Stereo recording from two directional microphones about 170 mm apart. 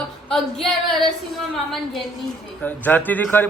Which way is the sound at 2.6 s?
10° left (ahead or behind).